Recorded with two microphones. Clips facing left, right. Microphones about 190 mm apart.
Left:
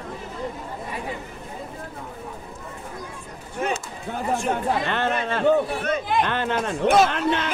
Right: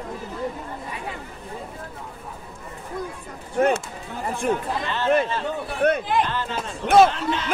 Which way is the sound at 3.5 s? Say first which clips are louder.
Right 7 dB; 55° right (ahead or behind).